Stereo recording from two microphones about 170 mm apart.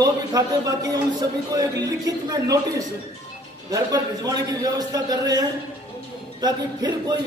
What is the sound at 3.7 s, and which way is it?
A man's voice, 20° right (ahead or behind).